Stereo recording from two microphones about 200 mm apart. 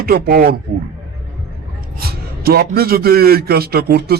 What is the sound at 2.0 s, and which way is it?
Speech, 50° right (ahead or behind).